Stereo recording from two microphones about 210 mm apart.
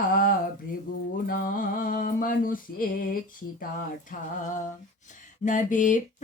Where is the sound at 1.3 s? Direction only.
40° left (ahead or behind).